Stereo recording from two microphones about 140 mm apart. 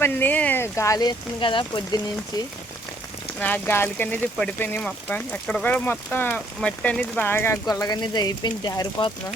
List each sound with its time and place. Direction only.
0.0 s speech: 15° left (ahead or behind); by 2.0 s 35° left (ahead or behind)
3.4 s speech: 15° left (ahead or behind); by 9.1 s 30° left (ahead or behind)